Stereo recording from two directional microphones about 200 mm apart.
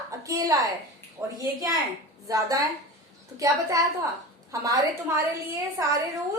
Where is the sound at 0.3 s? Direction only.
15° right (ahead or behind).